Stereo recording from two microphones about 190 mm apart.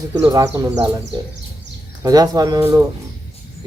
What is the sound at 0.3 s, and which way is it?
Speech, 15° right (ahead or behind).